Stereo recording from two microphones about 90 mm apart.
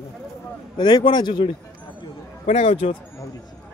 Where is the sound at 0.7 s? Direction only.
60° left (ahead or behind).